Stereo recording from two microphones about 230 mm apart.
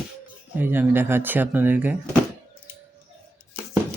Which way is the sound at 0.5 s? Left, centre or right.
Centre.